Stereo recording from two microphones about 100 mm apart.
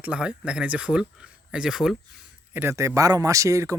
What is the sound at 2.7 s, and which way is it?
Speech, 30° right (ahead or behind).